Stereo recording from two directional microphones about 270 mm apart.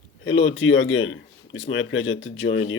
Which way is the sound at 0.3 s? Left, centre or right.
Left.